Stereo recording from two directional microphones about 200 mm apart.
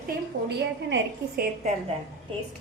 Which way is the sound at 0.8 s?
60° right (ahead or behind).